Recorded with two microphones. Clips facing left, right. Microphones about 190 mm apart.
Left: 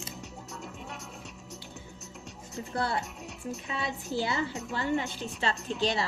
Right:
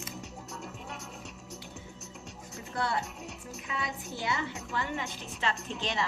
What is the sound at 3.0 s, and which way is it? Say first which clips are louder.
Music: even; centre (ahead or behind).